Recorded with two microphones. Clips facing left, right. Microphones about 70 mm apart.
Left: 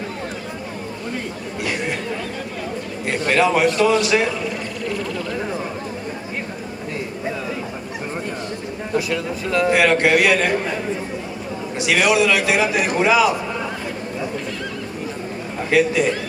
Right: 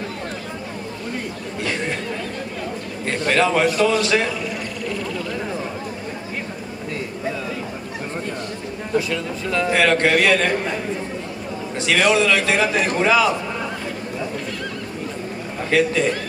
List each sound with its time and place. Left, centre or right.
1.6 s chatter: centre
3.1 s a man's voice: centre
8.9 s a man's voice: centre
11.8 s a man's voice: centre
15.7 s a man's voice: centre